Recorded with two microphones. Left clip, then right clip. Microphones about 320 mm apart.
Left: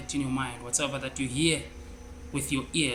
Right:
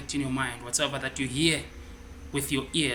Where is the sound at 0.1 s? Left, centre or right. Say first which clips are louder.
Right 2 dB; centre.